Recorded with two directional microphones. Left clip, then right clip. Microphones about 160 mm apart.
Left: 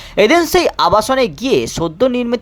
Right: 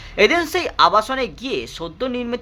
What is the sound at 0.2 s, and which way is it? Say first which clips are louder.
Speech: left 6 dB; 45° left (ahead or behind).